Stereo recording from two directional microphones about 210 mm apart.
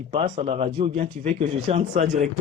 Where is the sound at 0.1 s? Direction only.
25° right (ahead or behind).